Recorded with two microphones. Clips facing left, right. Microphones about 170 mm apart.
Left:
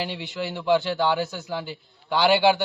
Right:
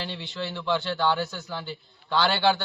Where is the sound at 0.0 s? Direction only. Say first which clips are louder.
Left 4 dB; 10° left (ahead or behind).